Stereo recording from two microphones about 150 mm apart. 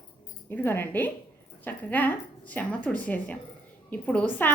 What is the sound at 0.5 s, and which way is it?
A woman's voice, 15° left (ahead or behind).